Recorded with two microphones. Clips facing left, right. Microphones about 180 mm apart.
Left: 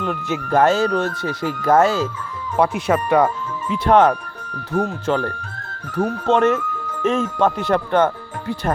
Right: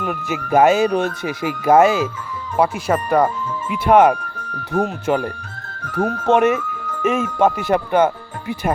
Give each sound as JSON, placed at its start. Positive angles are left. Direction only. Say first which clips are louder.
{"t": 0.0, "sound": "speech", "louder": "even", "side_deg": -10}
{"t": 2.6, "sound": "speech", "louder": "even", "side_deg": 0}